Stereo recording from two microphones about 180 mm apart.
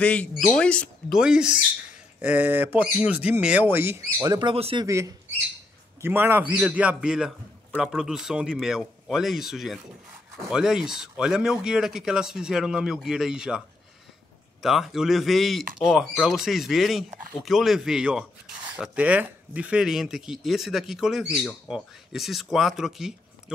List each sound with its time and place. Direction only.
0.0 s a man's voice: 5° left (ahead or behind); by 4.8 s 30° right (ahead or behind)
4.8 s a man's voice: 15° right (ahead or behind)
14.6 s a man's voice: centre (ahead or behind)